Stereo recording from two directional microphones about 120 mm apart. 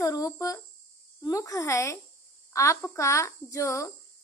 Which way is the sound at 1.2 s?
30° left (ahead or behind).